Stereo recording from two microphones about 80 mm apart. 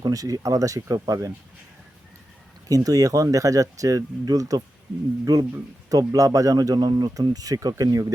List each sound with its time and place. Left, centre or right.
0.0 s speech: right
2.6 s speech: right